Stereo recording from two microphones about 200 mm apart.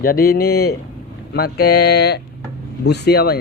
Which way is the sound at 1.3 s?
50° left (ahead or behind).